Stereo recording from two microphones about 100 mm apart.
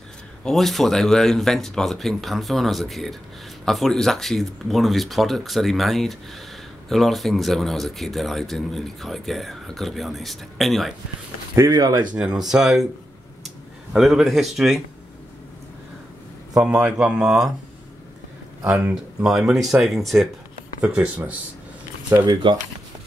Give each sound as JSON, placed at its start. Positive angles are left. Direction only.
{"t": 0.4, "sound": "speech", "side_deg": 5}
{"t": 11.5, "sound": "speech", "side_deg": -35}
{"t": 12.2, "sound": "speech", "side_deg": -5}
{"t": 13.9, "sound": "speech", "side_deg": -5}
{"t": 16.5, "sound": "speech", "side_deg": -10}
{"t": 18.6, "sound": "speech", "side_deg": -10}
{"t": 20.8, "sound": "speech", "side_deg": -15}
{"t": 22.2, "sound": "speech", "side_deg": -55}